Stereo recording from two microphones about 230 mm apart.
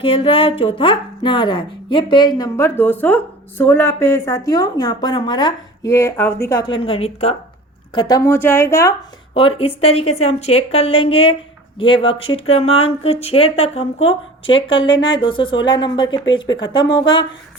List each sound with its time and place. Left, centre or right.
0.0 s speech: left
7.9 s speech: centre
9.3 s speech: left